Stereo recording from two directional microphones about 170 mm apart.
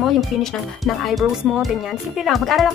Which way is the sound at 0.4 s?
Centre (ahead or behind).